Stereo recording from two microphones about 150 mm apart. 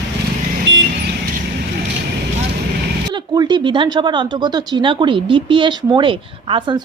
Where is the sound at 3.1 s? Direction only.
30° right (ahead or behind).